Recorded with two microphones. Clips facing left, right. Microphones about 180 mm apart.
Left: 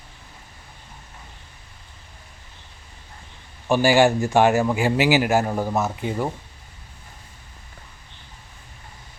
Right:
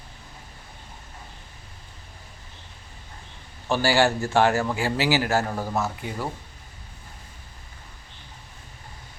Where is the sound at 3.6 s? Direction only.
15° left (ahead or behind).